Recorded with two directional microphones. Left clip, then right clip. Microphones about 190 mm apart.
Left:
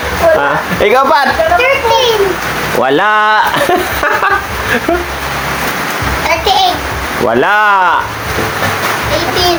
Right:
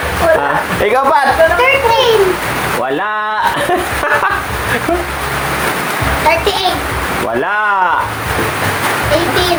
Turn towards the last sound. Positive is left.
turn(degrees=35)  # may be behind; listen again after turning